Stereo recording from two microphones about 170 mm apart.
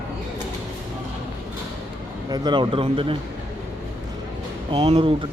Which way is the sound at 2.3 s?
25° right (ahead or behind).